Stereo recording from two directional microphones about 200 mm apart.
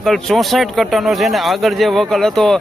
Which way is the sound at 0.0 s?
Centre (ahead or behind).